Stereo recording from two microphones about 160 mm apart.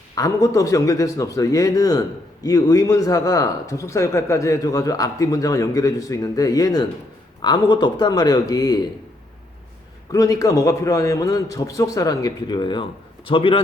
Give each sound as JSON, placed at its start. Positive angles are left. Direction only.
{"t": 0.2, "sound": "speech", "side_deg": 20}
{"t": 10.1, "sound": "speech", "side_deg": 20}